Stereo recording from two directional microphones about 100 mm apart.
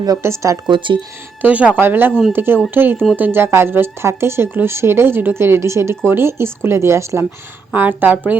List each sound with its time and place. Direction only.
0.0 s speech: 30° right (ahead or behind)
1.4 s speech: 15° right (ahead or behind)